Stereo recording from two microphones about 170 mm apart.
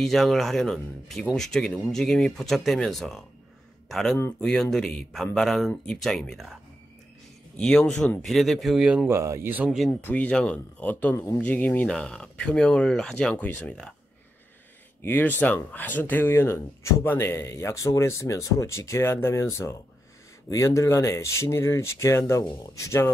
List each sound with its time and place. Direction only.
0.0 s speech: centre (ahead or behind)
7.5 s speech: 5° left (ahead or behind)
9.8 s speech: 10° left (ahead or behind)
15.0 s speech: 10° left (ahead or behind)